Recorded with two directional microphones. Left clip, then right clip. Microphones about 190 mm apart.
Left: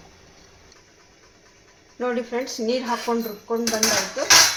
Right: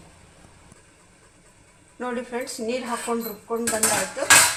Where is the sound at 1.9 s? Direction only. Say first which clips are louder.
Left 4 dB; 35° left (ahead or behind).